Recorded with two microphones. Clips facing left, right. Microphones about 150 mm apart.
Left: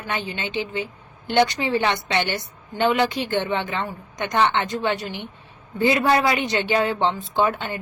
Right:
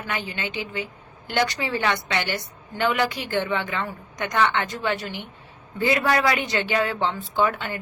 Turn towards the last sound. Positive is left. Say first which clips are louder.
# left 1 dB
turn(degrees=20)  # may be behind; listen again after turning